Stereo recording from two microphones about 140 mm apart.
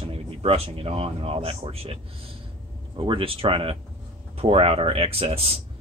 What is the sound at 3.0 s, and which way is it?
Speech, 35° right (ahead or behind).